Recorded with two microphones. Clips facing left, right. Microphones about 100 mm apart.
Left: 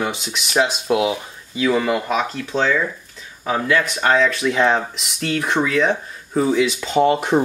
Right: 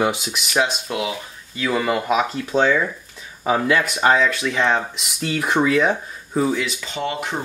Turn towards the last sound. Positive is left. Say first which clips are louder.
# left 10 dB
turn(degrees=40)  # may be behind; listen again after turning